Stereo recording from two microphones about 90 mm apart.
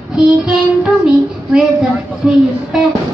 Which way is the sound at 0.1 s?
10° right (ahead or behind).